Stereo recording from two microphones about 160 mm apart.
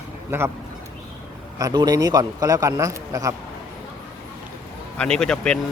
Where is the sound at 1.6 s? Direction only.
25° right (ahead or behind).